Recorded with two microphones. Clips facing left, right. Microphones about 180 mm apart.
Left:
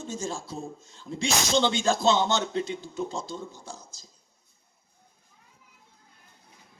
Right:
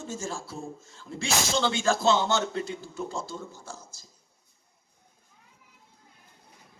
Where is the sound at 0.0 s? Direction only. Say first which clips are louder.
Left 1 dB; 20° left (ahead or behind).